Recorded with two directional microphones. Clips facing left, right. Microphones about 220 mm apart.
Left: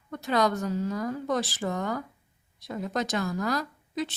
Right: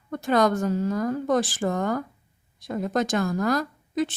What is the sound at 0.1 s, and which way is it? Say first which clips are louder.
A woman's voice: right 4 dB; 50° right (ahead or behind).